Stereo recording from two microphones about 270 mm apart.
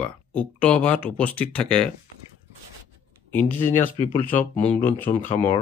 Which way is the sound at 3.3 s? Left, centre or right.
Centre.